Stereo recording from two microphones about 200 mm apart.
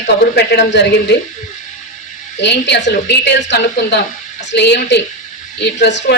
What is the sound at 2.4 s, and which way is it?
A man's voice, 60° left (ahead or behind).